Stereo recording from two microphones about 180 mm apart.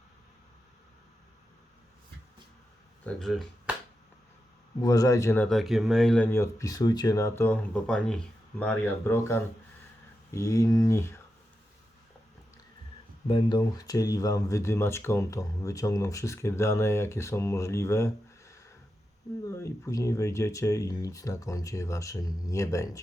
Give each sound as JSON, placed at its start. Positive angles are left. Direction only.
{"t": 3.1, "sound": "speech", "side_deg": 0}
{"t": 4.8, "sound": "speech", "side_deg": 20}
{"t": 5.5, "sound": "speech", "side_deg": 0}
{"t": 13.2, "sound": "speech", "side_deg": 25}